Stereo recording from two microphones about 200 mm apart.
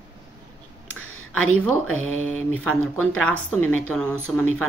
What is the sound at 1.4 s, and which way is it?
Speech, 90° left.